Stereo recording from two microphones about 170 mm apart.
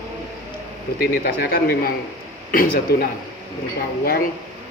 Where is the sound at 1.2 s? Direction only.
70° left (ahead or behind).